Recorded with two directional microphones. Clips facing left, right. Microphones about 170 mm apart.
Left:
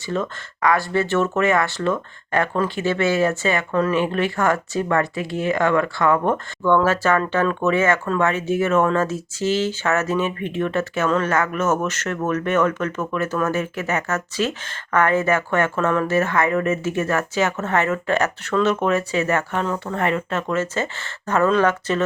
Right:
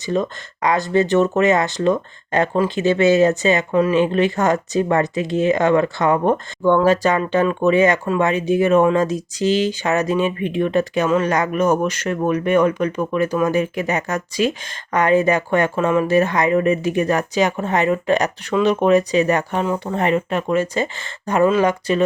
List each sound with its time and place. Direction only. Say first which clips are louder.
0.0 s speech: right 4 dB; 20° right (ahead or behind)